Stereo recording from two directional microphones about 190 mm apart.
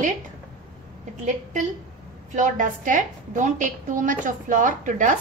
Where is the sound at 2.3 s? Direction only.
40° right (ahead or behind).